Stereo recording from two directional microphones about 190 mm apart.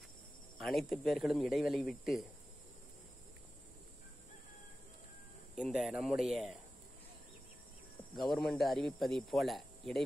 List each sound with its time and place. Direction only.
0.6 s speech: centre (ahead or behind)
5.6 s speech: 5° right (ahead or behind)
8.3 s speech: centre (ahead or behind)